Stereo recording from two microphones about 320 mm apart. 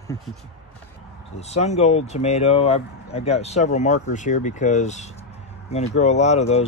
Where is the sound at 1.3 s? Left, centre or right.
Centre.